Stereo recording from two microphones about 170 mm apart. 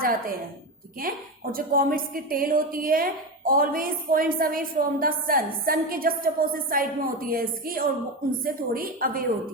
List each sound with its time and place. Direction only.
0.0 s a woman's voice: 55° right (ahead or behind)